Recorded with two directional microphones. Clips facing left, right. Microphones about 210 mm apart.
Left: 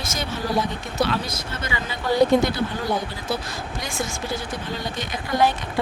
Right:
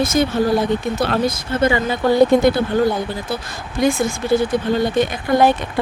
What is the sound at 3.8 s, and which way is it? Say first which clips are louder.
Speech: right 14 dB; 55° right (ahead or behind).